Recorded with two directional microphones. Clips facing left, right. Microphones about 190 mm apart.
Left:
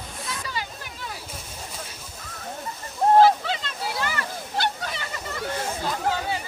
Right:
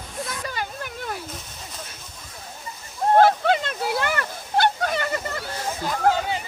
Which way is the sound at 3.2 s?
55° right (ahead or behind).